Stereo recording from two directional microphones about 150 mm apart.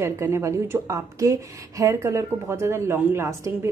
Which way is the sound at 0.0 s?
20° right (ahead or behind).